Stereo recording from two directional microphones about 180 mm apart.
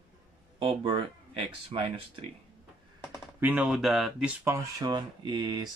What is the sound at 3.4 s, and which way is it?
Speech, 10° right (ahead or behind).